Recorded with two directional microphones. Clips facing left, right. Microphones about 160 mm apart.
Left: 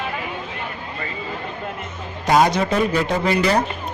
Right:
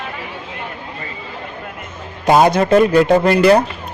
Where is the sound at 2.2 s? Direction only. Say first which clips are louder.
Right 4 dB; 55° right (ahead or behind).